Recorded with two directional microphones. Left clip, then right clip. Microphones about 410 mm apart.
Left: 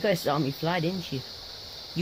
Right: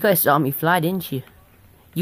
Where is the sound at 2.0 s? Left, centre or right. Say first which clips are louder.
Right 6 dB; centre.